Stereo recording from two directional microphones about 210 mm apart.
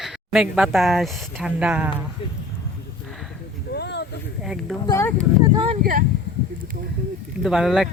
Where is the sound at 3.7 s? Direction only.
55° left (ahead or behind).